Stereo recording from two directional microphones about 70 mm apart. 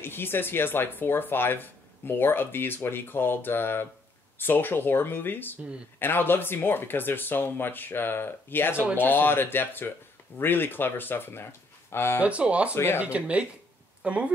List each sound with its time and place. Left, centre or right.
0.0 s speech: left
12.2 s speech: centre
12.7 s speech: left
13.0 s speech: centre